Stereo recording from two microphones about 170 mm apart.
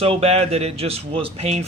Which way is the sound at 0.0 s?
35° right (ahead or behind).